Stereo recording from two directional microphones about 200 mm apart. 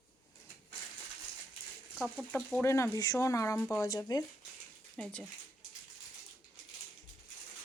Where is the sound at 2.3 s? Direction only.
10° left (ahead or behind).